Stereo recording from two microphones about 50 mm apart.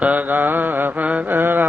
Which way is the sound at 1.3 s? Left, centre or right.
Right.